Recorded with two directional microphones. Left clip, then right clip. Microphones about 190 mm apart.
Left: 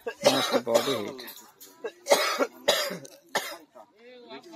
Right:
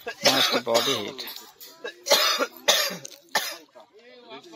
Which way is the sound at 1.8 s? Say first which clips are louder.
Right 2 dB; 35° left (ahead or behind).